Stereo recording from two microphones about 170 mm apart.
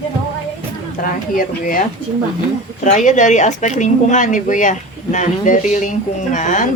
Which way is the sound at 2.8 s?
45° left (ahead or behind).